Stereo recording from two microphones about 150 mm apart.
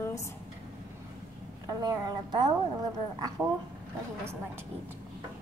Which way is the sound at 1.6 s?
25° right (ahead or behind).